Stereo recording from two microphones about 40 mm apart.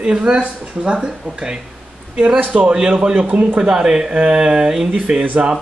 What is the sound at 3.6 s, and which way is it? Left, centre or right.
Speech, centre.